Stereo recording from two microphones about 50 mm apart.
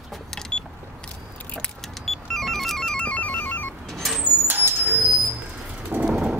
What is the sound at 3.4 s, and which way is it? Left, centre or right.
Music, left.